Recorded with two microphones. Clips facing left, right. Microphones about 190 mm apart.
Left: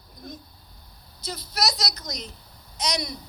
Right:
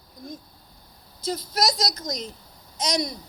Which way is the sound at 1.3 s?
45° right (ahead or behind).